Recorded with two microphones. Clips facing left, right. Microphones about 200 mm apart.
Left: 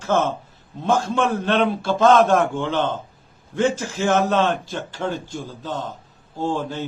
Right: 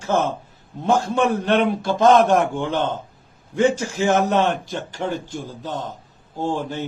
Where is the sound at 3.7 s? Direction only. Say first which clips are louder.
Right 1 dB; 15° right (ahead or behind).